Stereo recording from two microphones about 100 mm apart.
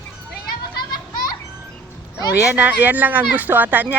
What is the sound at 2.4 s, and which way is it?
Speech, 15° right (ahead or behind).